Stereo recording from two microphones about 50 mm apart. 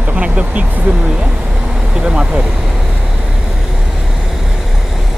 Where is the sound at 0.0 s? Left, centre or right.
Right.